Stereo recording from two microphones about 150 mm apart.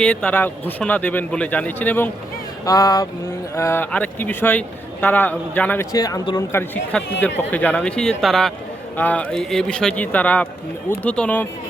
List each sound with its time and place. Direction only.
0.0 s a man's voice: 5° left (ahead or behind)
2.6 s a sound: 25° left (ahead or behind)
3.5 s a man's voice: 15° left (ahead or behind)
6.5 s a man's voice: 15° left (ahead or behind)